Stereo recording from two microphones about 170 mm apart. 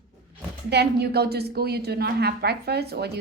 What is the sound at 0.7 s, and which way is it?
A woman's voice, 75° right (ahead or behind).